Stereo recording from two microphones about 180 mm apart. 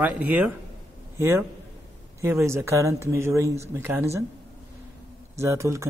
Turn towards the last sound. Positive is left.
turn(degrees=-15)  # may be behind; listen again after turning